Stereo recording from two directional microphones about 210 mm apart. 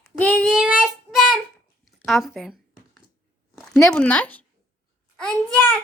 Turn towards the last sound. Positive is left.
turn(degrees=5)  # may be behind; listen again after turning